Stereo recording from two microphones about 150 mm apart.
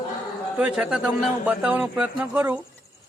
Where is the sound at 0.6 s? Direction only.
5° right (ahead or behind).